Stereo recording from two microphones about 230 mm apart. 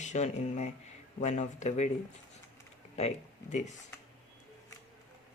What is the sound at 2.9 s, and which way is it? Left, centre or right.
Speech, left.